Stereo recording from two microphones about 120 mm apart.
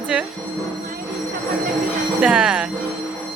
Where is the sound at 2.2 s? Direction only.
10° right (ahead or behind).